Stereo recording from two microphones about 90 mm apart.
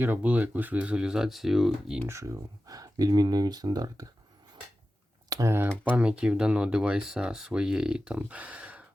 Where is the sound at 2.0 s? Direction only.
35° right (ahead or behind).